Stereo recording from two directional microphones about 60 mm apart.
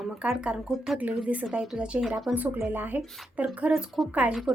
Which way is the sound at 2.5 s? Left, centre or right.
Right.